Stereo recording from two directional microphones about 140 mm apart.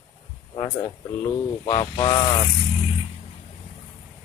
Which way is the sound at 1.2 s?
25° left (ahead or behind).